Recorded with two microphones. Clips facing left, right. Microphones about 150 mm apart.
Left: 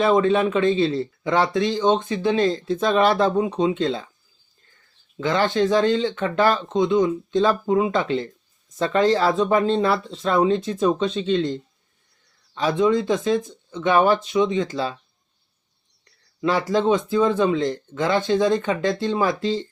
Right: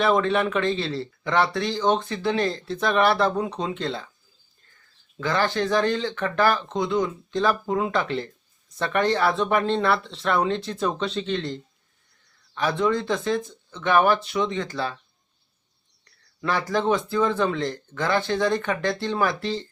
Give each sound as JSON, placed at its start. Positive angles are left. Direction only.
{"t": 0.0, "sound": "a man's voice", "side_deg": 25}
{"t": 5.2, "sound": "a man's voice", "side_deg": 20}
{"t": 16.4, "sound": "a man's voice", "side_deg": 20}